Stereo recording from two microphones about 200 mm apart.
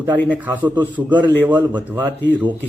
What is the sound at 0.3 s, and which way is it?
A man's voice, 10° right (ahead or behind).